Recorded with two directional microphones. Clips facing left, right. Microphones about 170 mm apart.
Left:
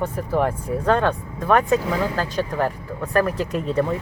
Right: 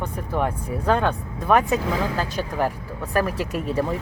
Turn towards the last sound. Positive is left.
turn(degrees=-5)  # may be behind; listen again after turning